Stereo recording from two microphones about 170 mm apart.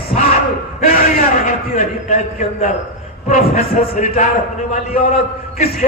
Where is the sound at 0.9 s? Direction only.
55° left (ahead or behind).